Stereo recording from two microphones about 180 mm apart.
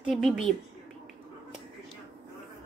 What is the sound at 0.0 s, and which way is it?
Speech, centre (ahead or behind).